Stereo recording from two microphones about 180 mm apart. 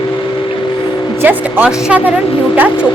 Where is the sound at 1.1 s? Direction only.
10° right (ahead or behind).